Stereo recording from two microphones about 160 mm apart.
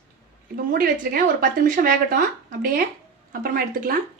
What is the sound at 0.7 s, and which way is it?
A woman's voice, 60° right (ahead or behind).